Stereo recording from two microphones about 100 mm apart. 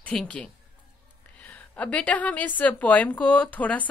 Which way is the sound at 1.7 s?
15° left (ahead or behind).